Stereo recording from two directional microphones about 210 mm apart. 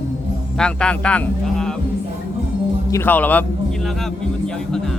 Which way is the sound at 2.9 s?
10° left (ahead or behind).